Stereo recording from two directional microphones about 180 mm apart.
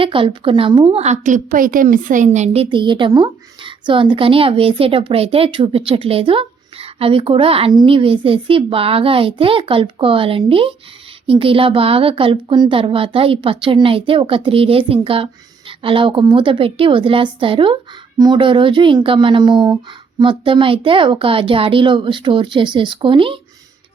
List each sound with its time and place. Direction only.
0.0 s a woman's voice: 30° right (ahead or behind)